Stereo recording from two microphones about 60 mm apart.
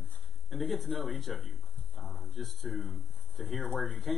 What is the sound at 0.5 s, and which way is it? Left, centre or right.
Speech, centre.